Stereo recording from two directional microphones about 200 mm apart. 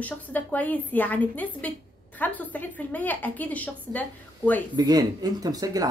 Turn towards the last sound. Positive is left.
turn(degrees=-20)  # may be behind; listen again after turning